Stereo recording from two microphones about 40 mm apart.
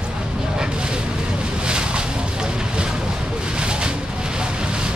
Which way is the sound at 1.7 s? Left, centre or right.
Right.